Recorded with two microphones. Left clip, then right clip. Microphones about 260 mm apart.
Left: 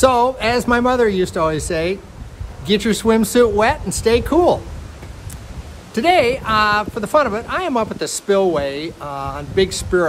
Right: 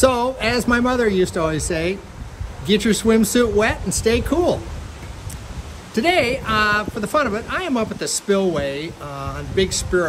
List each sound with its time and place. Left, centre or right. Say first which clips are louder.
0.0 s speech: left 3 dB; centre
5.9 s speech: left 3 dB; centre